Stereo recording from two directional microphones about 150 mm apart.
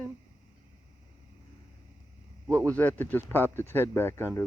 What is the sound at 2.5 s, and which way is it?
Speech, 10° left (ahead or behind).